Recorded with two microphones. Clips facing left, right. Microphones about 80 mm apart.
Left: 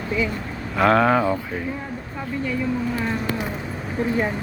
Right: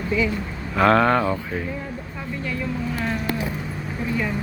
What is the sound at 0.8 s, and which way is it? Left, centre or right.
Speech, centre.